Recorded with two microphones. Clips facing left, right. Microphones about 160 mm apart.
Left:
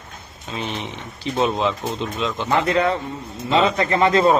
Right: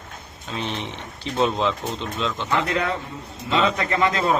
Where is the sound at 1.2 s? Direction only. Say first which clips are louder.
Left 1 dB; 10° left (ahead or behind).